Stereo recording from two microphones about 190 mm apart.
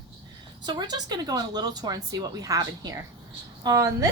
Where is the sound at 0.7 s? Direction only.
20° right (ahead or behind).